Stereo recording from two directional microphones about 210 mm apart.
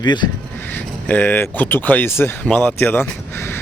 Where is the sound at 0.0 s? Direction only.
20° left (ahead or behind).